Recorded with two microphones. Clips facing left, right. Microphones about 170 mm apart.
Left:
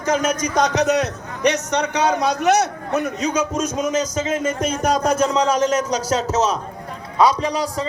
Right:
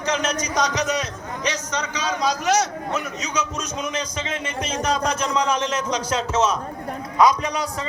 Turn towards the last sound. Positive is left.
turn(degrees=35)  # may be behind; listen again after turning